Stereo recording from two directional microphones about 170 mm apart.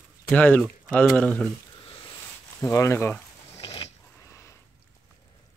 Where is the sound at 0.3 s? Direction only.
10° left (ahead or behind).